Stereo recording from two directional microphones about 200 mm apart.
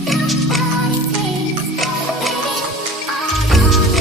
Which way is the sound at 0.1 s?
Centre (ahead or behind).